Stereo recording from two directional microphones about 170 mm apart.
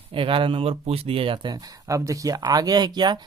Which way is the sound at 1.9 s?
20° right (ahead or behind).